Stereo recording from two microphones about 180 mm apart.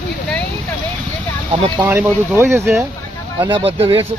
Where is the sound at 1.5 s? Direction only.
25° right (ahead or behind).